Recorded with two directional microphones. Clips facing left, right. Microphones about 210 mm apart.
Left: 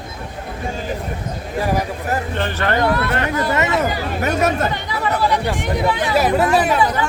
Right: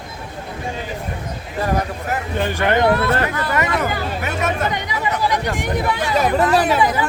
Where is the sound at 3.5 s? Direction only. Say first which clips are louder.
Left 2 dB; 25° left (ahead or behind).